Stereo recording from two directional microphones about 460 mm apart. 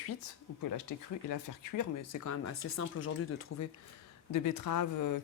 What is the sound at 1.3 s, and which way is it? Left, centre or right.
Speech, left.